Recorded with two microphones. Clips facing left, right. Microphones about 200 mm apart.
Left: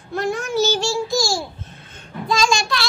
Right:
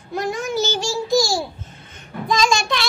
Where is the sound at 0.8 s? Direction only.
15° right (ahead or behind).